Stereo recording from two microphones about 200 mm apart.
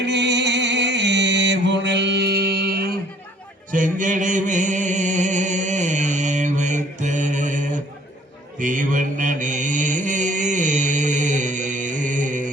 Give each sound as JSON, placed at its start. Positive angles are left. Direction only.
{"t": 0.0, "sound": "music", "side_deg": -60}
{"t": 3.7, "sound": "music", "side_deg": -40}
{"t": 8.5, "sound": "mantra", "side_deg": -40}